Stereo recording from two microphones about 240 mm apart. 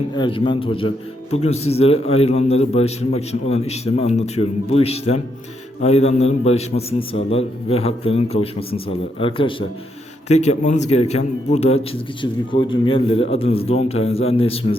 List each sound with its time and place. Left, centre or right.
0.2 s a man's voice: left